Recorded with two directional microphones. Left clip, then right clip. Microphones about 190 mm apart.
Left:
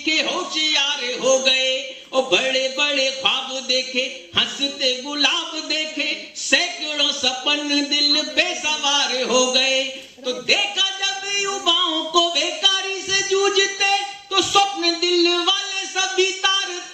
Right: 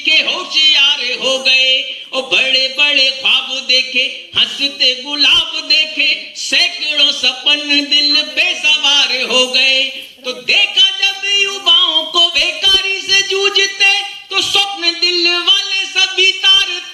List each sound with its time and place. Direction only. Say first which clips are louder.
0.0 s speech: right 8 dB; 50° left (ahead or behind)
10.2 s music: right 6 dB; 50° left (ahead or behind)